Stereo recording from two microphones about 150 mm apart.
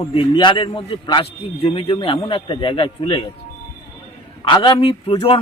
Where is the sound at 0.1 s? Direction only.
35° left (ahead or behind).